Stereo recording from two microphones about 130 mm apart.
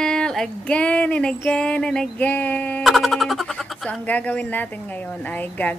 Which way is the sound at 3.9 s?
10° left (ahead or behind).